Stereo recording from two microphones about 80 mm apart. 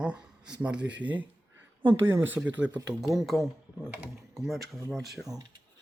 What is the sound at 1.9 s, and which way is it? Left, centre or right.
Speech, right.